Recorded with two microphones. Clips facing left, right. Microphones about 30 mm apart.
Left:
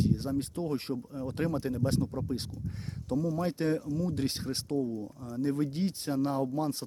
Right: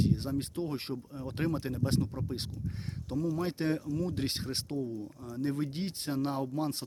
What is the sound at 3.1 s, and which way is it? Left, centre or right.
Speech, right.